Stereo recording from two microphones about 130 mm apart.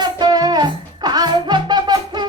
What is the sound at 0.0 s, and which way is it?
Music, 30° right (ahead or behind).